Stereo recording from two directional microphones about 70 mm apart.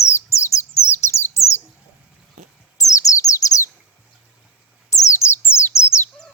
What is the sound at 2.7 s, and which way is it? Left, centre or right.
Bird, left.